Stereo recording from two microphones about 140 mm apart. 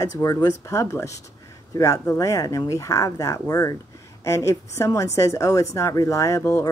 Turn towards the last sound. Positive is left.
turn(degrees=20)  # may be behind; listen again after turning